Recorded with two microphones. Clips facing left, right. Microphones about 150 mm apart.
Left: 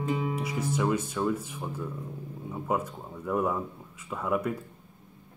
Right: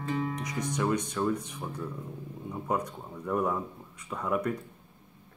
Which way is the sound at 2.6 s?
5° left (ahead or behind).